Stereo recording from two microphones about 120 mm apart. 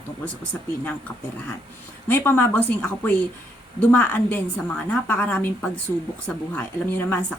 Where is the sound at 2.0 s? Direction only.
15° left (ahead or behind).